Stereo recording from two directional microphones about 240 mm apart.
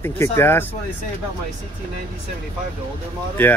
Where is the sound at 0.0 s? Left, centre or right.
Centre.